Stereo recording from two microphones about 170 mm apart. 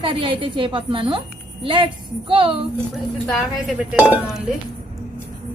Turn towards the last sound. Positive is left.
turn(degrees=-5)  # may be behind; listen again after turning